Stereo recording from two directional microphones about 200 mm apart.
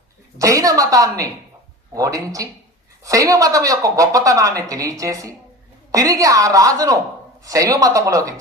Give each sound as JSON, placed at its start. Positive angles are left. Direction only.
{"t": 0.3, "sound": "speech", "side_deg": -15}